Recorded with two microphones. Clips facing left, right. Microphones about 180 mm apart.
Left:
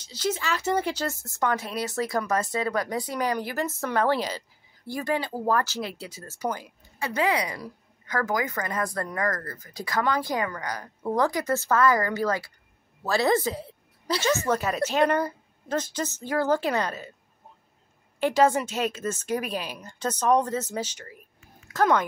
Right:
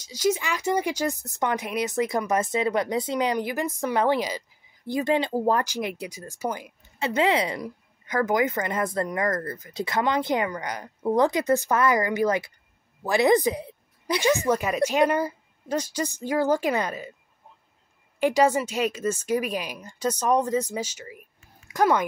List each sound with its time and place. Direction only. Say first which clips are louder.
0.0 s speech: right 4 dB; 10° right (ahead or behind)
7.0 s a woman's voice: right 3 dB; 25° right (ahead or behind)
18.2 s speech: right 1 dB; 10° right (ahead or behind)